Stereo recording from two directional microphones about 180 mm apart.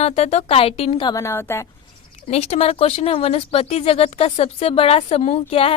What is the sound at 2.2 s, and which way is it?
Speech, 35° left (ahead or behind).